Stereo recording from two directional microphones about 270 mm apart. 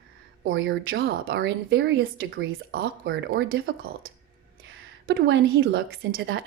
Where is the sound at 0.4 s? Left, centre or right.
Right.